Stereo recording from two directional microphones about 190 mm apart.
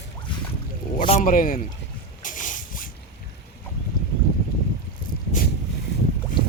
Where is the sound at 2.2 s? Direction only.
45° left (ahead or behind).